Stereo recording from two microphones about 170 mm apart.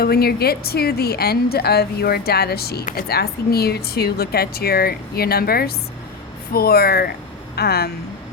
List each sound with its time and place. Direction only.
0.0 s a woman's voice: 65° left (ahead or behind)